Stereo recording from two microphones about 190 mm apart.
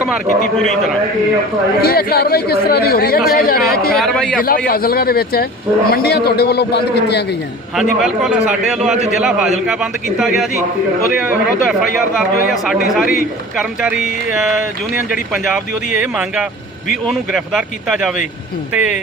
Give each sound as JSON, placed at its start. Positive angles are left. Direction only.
{"t": 1.8, "sound": "speech", "side_deg": 55}
{"t": 3.9, "sound": "a man's voice", "side_deg": 5}
{"t": 4.4, "sound": "a man's voice", "side_deg": 50}
{"t": 7.8, "sound": "a man's voice", "side_deg": -5}
{"t": 11.2, "sound": "a man's voice", "side_deg": -5}